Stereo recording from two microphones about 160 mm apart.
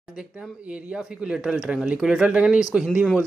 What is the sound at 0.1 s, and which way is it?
Speech, 5° right (ahead or behind).